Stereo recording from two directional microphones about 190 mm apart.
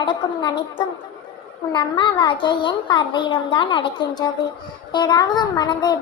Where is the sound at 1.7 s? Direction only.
25° left (ahead or behind).